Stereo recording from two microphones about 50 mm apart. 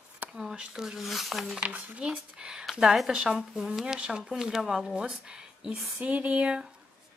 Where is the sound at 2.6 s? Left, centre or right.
Centre.